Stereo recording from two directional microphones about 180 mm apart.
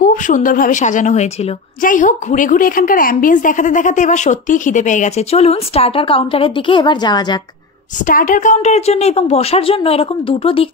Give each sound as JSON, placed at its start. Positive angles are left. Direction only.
{"t": 0.0, "sound": "a woman's voice", "side_deg": 50}
{"t": 8.1, "sound": "a woman's voice", "side_deg": 50}